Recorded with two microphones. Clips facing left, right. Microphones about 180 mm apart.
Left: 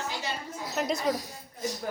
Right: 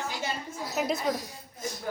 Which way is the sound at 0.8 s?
Centre (ahead or behind).